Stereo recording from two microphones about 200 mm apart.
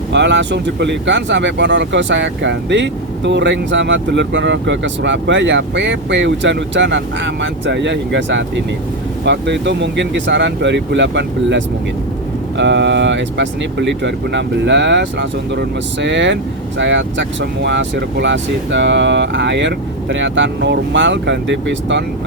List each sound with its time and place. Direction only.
0.1 s speech: 60° right (ahead or behind)